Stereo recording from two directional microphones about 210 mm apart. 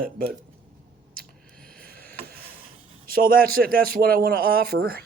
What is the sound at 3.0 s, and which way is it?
A man's voice, 45° right (ahead or behind).